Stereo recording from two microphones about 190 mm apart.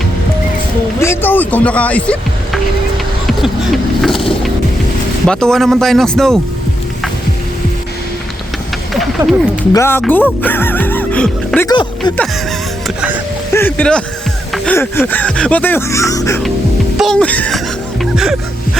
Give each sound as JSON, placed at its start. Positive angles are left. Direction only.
{"t": 0.9, "sound": "speech", "side_deg": 15}
{"t": 3.2, "sound": "vehicle", "side_deg": 0}
{"t": 5.2, "sound": "speech", "side_deg": 5}
{"t": 8.9, "sound": "a sound", "side_deg": 0}
{"t": 9.7, "sound": "speech", "side_deg": 15}
{"t": 11.7, "sound": "speech", "side_deg": 25}
{"t": 13.5, "sound": "speech", "side_deg": 10}
{"t": 14.5, "sound": "music", "side_deg": 0}
{"t": 14.8, "sound": "speech", "side_deg": 10}
{"t": 17.0, "sound": "speech", "side_deg": 5}
{"t": 18.0, "sound": "music", "side_deg": 0}